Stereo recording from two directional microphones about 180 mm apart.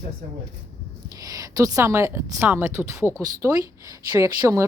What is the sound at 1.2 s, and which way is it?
A woman's voice, 20° right (ahead or behind).